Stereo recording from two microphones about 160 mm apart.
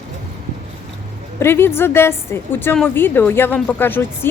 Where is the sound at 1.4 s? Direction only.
15° left (ahead or behind).